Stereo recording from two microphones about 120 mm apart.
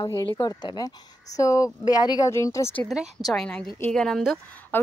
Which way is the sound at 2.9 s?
Centre (ahead or behind).